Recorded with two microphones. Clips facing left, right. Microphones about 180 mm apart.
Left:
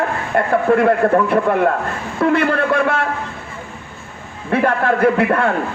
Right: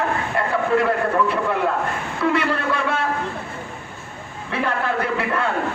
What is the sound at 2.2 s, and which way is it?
Speech, 55° left (ahead or behind).